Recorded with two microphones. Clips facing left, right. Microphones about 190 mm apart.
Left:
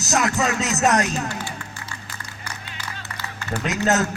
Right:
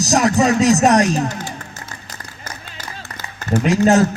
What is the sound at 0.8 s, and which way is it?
Music, 35° right (ahead or behind).